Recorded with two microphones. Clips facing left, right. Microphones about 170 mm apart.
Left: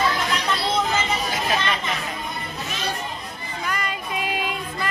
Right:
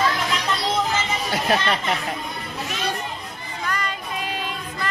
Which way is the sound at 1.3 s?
60° right (ahead or behind).